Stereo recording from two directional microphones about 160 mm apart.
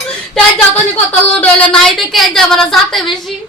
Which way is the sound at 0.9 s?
10° left (ahead or behind).